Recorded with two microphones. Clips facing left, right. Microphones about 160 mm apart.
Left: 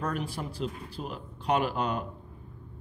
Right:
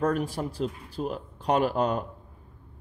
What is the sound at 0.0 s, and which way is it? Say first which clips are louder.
Speech: right 6 dB; 45° right (ahead or behind).